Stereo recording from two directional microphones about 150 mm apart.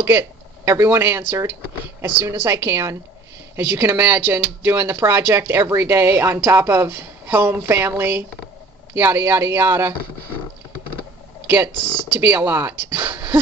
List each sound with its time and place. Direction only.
0.0 s speech: 15° right (ahead or behind)
11.8 s speech: 30° left (ahead or behind)
12.2 s speech: 15° right (ahead or behind)